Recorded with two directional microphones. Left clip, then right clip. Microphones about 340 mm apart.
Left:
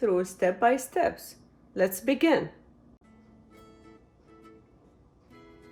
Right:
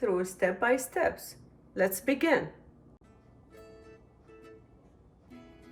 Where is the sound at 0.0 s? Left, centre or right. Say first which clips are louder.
Left 3 dB; left.